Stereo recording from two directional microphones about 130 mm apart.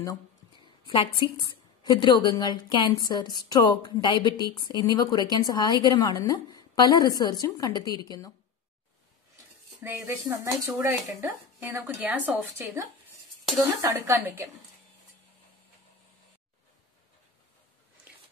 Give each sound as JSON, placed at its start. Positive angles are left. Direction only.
{"t": 0.8, "sound": "a woman's voice", "side_deg": 35}
{"t": 9.8, "sound": "speech", "side_deg": -15}